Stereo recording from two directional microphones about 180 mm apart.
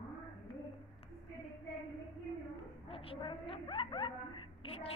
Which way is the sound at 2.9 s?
30° left (ahead or behind).